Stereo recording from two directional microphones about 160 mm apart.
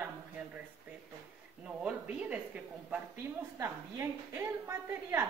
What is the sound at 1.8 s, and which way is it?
A woman's voice, 5° right (ahead or behind).